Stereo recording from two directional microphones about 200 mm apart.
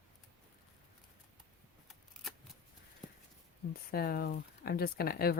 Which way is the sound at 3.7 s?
50° left (ahead or behind).